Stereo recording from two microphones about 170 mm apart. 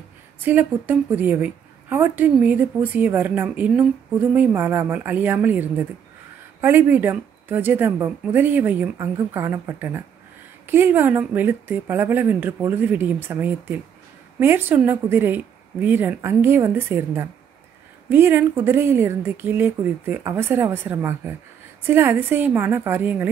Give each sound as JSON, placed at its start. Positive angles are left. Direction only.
{"t": 0.4, "sound": "a woman's voice", "side_deg": -10}